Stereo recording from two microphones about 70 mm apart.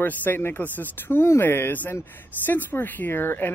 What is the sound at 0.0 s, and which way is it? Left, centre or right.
Speech, left.